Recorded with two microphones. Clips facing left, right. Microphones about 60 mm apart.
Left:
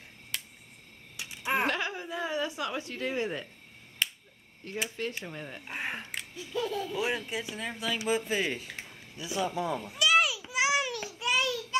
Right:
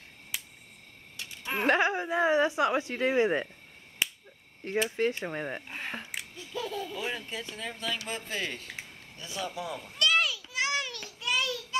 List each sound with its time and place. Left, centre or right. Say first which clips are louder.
0.3 s finger snapping: left 1 dB; centre
1.1 s a sound: left 4 dB; centre
1.7 s a woman's voice: right 7 dB; right
4.0 s finger snapping: even; centre
4.8 s speech: right 6 dB; right
5.7 s speech: left 2 dB; centre
6.1 s a sound: left 3 dB; centre
6.9 s speech: left 4 dB; centre
9.3 s speech: left 5 dB; left
9.8 s a sound: left 1 dB; centre
10.4 s child singing: left 3 dB; centre